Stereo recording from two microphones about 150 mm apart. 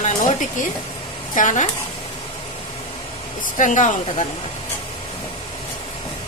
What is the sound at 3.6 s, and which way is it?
Speech, 55° left (ahead or behind).